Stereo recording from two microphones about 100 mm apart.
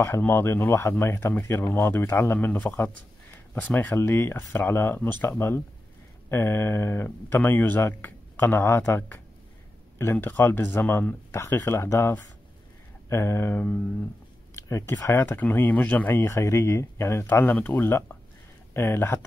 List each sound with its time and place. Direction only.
0.0 s speech: 25° left (ahead or behind)
14.5 s a sound: 30° left (ahead or behind)
15.0 s speech: 25° left (ahead or behind)